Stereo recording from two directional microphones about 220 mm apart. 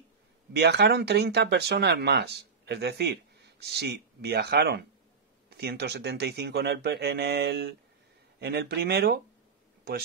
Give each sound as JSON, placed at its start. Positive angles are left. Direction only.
{"t": 0.5, "sound": "speech", "side_deg": -50}